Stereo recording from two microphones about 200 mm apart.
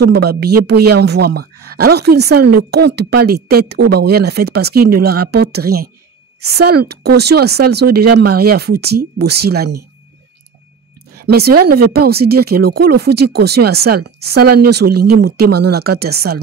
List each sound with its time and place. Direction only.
0.0 s speech: 55° right (ahead or behind)
11.1 s speech: 50° right (ahead or behind)